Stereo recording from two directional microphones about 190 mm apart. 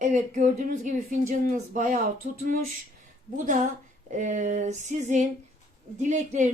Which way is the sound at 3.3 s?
40° right (ahead or behind).